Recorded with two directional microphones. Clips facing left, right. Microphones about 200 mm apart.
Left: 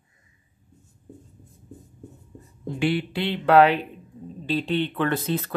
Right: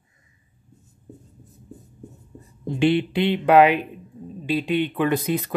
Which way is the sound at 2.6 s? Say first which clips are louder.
Right 5 dB; 20° right (ahead or behind).